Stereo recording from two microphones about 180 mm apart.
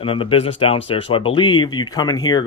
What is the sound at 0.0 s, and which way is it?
Speech, 30° left (ahead or behind).